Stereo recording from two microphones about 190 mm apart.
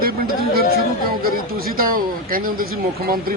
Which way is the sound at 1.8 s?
50° right (ahead or behind).